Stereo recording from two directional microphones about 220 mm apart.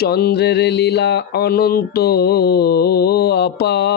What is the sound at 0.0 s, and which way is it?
Speech, 45° left (ahead or behind).